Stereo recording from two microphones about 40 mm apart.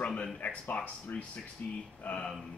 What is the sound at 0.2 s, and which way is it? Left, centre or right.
Speech, left.